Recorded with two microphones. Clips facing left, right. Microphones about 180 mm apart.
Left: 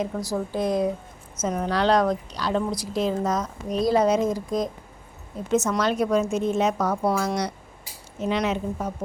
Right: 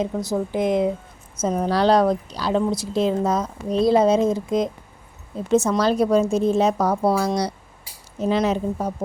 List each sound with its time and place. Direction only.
0.1 s a woman's voice: 20° right (ahead or behind)
1.4 s a woman's voice: 35° right (ahead or behind)